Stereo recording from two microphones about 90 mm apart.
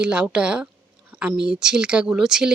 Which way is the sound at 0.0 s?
10° right (ahead or behind).